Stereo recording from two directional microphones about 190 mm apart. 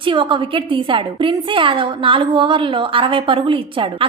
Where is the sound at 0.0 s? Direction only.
25° right (ahead or behind).